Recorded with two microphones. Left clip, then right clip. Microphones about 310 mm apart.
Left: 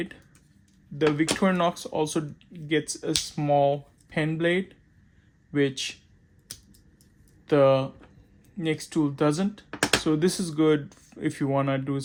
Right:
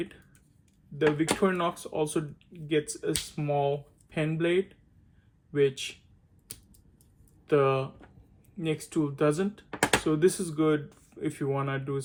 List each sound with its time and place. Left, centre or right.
0.9 s speech: left
7.4 s speech: left